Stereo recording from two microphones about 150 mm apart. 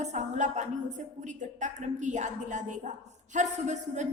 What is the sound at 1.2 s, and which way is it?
A woman's voice, 55° right (ahead or behind).